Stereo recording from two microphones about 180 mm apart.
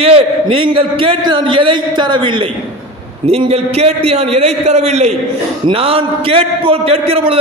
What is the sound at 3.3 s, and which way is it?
A man's voice, 35° right (ahead or behind).